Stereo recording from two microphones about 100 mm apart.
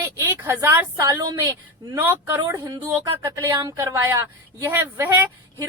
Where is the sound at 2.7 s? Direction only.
40° right (ahead or behind).